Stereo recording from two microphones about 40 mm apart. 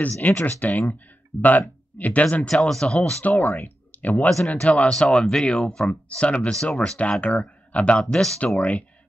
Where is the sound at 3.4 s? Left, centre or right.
Left.